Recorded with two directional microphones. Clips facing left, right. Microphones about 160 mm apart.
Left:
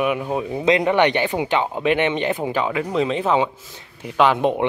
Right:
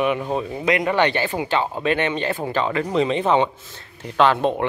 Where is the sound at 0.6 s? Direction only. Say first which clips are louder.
Left 3 dB; 20° left (ahead or behind).